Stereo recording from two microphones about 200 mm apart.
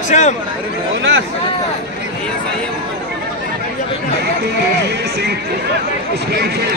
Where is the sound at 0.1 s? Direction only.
35° left (ahead or behind).